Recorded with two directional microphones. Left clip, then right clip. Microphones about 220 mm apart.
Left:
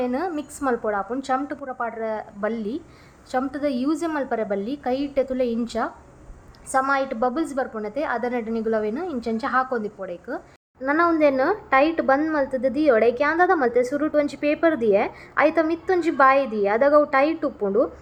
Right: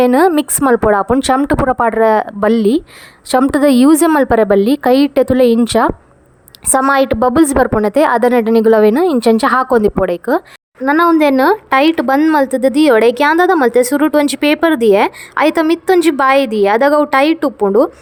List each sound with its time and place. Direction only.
0.0 s a woman's voice: 45° right (ahead or behind)